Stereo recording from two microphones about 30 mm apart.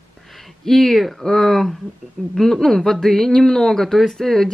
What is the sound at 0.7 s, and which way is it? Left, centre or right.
Speech, centre.